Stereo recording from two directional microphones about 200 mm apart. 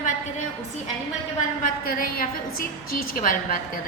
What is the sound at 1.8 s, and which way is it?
A woman's voice, 45° left (ahead or behind).